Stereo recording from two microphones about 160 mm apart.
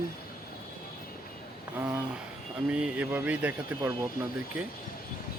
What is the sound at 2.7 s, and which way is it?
Speech, 5° right (ahead or behind).